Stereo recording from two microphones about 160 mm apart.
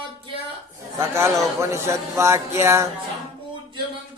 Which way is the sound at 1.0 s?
15° right (ahead or behind).